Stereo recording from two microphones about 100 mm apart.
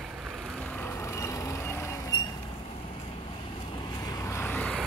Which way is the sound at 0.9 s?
30° left (ahead or behind).